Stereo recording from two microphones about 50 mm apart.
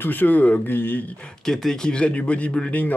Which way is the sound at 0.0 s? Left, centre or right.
Left.